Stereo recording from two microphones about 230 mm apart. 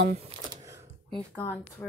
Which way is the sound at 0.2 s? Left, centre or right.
Centre.